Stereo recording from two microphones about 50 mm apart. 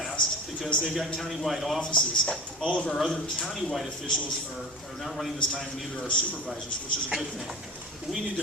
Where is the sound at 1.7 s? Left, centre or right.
Centre.